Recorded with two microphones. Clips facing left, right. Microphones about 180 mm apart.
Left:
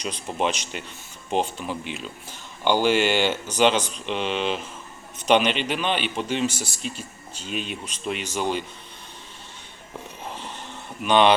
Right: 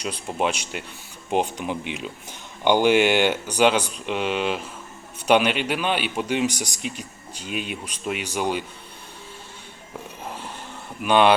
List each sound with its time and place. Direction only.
0.0 s a man's voice: 5° right (ahead or behind)
10.2 s vehicle: 10° right (ahead or behind)
11.0 s a man's voice: 10° right (ahead or behind)